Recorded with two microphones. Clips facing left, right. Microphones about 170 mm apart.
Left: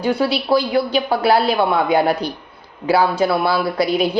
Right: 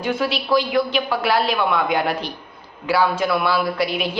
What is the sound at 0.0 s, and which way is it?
A woman's voice, 35° left (ahead or behind).